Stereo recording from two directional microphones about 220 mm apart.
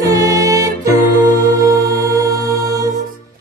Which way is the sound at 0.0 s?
15° right (ahead or behind).